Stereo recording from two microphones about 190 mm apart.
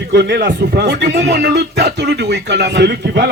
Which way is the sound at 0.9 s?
65° right (ahead or behind).